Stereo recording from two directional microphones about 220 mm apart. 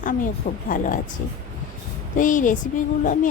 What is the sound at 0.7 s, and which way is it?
Speech, 35° left (ahead or behind).